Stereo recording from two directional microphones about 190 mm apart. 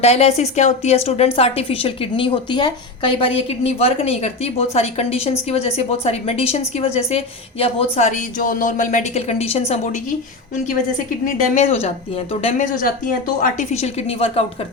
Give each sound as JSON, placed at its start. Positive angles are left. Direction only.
{"t": 0.0, "sound": "a woman's voice", "side_deg": 35}
{"t": 11.5, "sound": "a woman's voice", "side_deg": 35}